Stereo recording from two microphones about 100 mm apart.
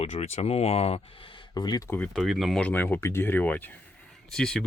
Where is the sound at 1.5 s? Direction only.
45° left (ahead or behind).